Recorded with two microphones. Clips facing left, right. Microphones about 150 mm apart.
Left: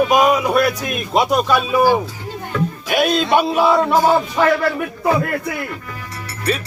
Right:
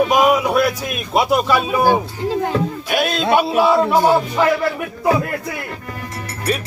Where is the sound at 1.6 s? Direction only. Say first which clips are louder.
Left 1 dB; 50° right (ahead or behind).